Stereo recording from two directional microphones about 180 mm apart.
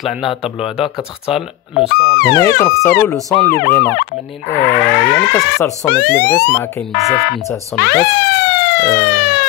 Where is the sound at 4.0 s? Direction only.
65° left (ahead or behind).